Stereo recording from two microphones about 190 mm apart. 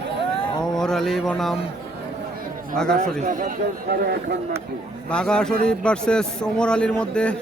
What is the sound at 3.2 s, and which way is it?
A man's voice, 45° right (ahead or behind).